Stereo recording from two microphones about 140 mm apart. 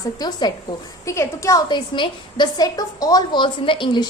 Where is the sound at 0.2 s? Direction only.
30° left (ahead or behind).